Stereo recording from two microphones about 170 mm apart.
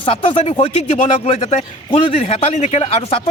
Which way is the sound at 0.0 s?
35° left (ahead or behind).